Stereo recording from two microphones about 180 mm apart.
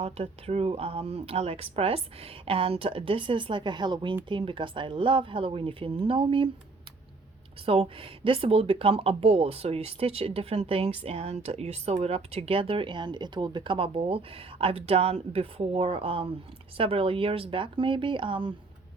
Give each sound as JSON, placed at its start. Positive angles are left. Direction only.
{"t": 0.0, "sound": "speech", "side_deg": -35}
{"t": 7.6, "sound": "speech", "side_deg": -30}